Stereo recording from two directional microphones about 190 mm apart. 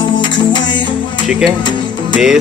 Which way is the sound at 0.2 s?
25° left (ahead or behind).